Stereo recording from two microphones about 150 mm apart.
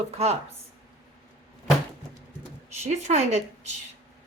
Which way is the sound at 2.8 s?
50° right (ahead or behind).